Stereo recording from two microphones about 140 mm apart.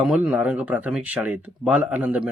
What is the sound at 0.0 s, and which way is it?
Speech, 5° right (ahead or behind).